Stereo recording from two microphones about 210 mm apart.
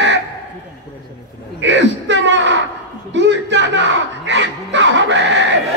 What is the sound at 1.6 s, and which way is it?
Speech, 60° right (ahead or behind).